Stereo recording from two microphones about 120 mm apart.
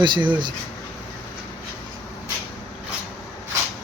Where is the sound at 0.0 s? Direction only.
40° right (ahead or behind).